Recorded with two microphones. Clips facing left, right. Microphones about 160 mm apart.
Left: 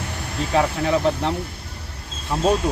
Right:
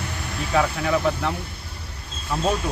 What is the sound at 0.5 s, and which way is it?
Speech, 30° left (ahead or behind).